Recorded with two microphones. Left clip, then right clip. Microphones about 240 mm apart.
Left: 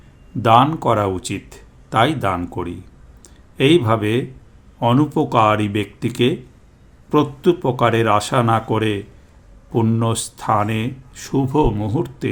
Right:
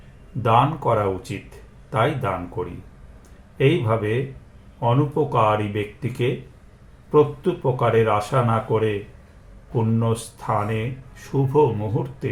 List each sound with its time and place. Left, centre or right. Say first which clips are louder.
0.4 s speech: left 5 dB; left